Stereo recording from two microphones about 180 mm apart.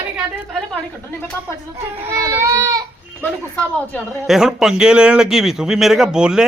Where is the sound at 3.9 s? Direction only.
Centre (ahead or behind).